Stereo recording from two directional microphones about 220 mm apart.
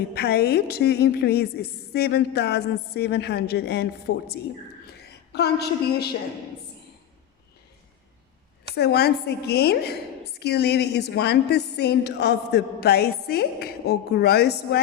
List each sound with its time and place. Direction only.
0.1 s a woman's voice: 45° left (ahead or behind)
4.9 s a sound: 50° left (ahead or behind)
8.7 s a woman's voice: 45° left (ahead or behind)